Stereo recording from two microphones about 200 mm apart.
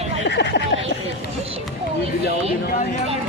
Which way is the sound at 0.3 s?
60° left (ahead or behind).